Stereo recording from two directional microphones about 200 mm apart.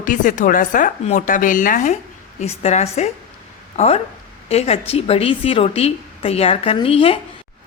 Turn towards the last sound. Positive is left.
turn(degrees=30)  # may be behind; listen again after turning